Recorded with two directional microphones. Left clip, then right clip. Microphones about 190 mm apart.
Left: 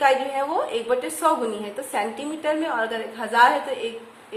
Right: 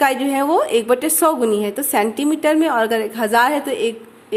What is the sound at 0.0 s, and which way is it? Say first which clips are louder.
A woman's voice: right 3 dB; 55° right (ahead or behind).